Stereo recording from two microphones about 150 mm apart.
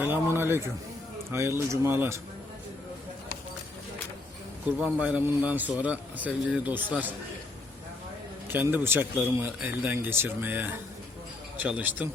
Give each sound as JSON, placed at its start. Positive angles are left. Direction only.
{"t": 0.0, "sound": "a sound", "side_deg": -15}
{"t": 1.3, "sound": "a man's voice", "side_deg": -15}
{"t": 4.8, "sound": "a man's voice", "side_deg": -10}
{"t": 8.4, "sound": "a man's voice", "side_deg": -15}